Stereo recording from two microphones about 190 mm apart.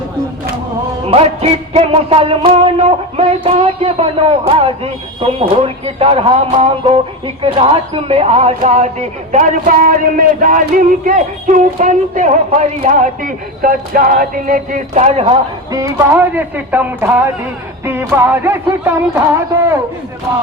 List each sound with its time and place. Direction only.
1.0 s music: 30° right (ahead or behind)
7.4 s speech: 30° right (ahead or behind)
12.8 s a sound: 40° right (ahead or behind)
15.7 s music: 15° right (ahead or behind)